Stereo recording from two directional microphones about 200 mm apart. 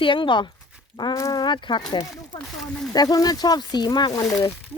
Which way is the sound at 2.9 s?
20° left (ahead or behind).